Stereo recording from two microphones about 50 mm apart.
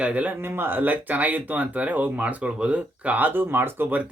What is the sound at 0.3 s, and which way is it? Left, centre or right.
Speech, right.